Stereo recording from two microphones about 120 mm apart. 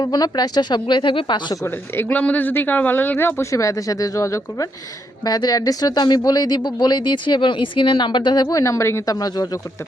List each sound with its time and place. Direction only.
0.0 s speech: 35° left (ahead or behind)
1.6 s speech: 15° left (ahead or behind); by 8.4 s 40° left (ahead or behind)
8.4 s speech: 25° left (ahead or behind)